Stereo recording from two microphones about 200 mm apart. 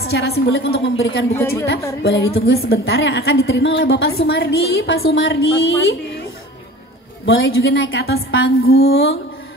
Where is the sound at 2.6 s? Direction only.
55° left (ahead or behind); by 5.3 s 75° left (ahead or behind).